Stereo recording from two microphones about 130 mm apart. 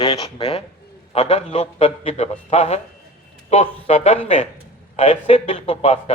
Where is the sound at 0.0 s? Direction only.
40° left (ahead or behind); by 4.4 s 65° left (ahead or behind).